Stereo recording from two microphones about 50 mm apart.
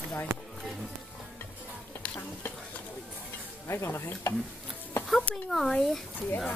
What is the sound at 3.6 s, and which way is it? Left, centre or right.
Stir, left.